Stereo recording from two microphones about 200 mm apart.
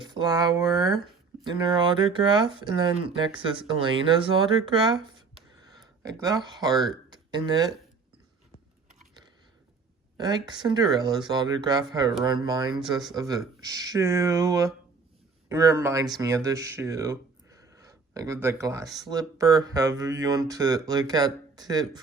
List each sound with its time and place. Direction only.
0.0 s speech: 20° right (ahead or behind)
6.0 s speech: 20° right (ahead or behind)
10.2 s speech: 20° right (ahead or behind)